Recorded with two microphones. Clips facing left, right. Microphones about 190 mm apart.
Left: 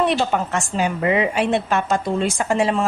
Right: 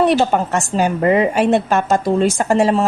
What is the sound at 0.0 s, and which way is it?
A woman's voice, 40° right (ahead or behind).